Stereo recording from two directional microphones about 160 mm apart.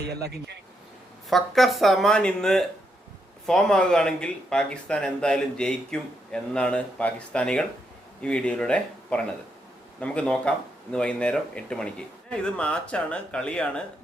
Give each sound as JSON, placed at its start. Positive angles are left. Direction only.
{"t": 0.1, "sound": "speech", "side_deg": -90}
{"t": 1.3, "sound": "speech", "side_deg": 0}